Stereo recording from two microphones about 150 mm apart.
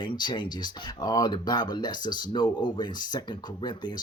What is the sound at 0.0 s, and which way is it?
Speech, 30° left (ahead or behind).